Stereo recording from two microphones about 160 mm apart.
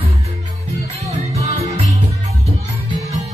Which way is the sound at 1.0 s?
20° right (ahead or behind).